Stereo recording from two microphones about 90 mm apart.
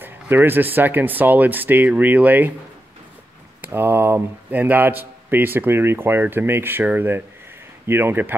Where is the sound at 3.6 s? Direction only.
25° right (ahead or behind).